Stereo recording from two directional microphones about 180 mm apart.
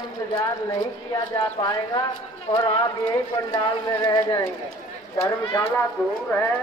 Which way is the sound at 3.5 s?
20° left (ahead or behind).